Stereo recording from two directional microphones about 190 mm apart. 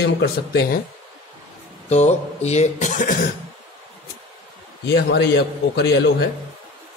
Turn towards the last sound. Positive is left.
turn(degrees=60)  # may be behind; listen again after turning